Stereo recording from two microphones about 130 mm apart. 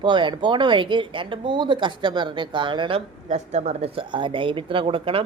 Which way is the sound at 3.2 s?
65° right (ahead or behind).